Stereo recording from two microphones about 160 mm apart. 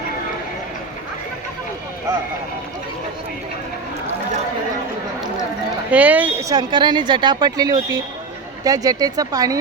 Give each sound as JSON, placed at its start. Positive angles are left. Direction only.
{"t": 5.9, "sound": "speech", "side_deg": -10}
{"t": 6.5, "sound": "a woman's voice", "side_deg": -25}